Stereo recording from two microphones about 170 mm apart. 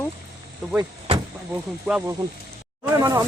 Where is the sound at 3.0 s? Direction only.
20° right (ahead or behind).